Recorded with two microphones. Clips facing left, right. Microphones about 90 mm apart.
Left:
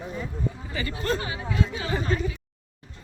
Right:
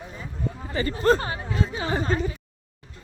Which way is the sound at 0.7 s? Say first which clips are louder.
Right 8 dB; 35° right (ahead or behind).